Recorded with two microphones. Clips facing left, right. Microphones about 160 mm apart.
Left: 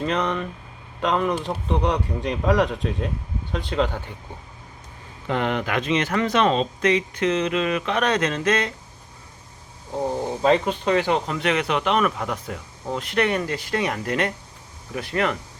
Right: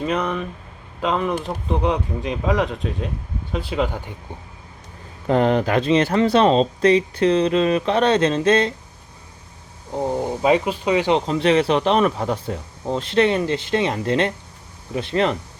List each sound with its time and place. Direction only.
0.0 s speech: 5° right (ahead or behind)
5.3 s speech: 35° right (ahead or behind)
9.9 s speech: 15° right (ahead or behind)
11.3 s speech: 30° right (ahead or behind)